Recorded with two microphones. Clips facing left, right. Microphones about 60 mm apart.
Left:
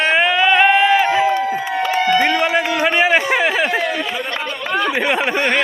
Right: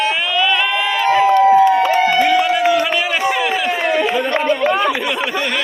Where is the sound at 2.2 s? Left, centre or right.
Left.